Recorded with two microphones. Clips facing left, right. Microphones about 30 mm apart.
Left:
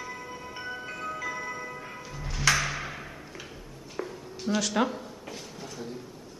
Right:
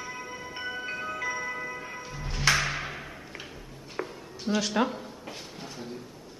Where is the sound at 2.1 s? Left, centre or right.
Right.